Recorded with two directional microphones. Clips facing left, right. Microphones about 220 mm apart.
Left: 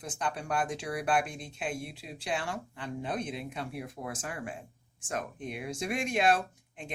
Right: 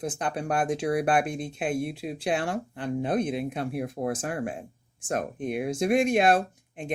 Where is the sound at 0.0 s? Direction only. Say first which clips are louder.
Right 6 dB; 55° right (ahead or behind).